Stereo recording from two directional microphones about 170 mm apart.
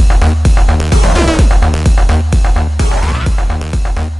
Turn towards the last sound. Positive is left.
turn(degrees=0)  # may be behind; listen again after turning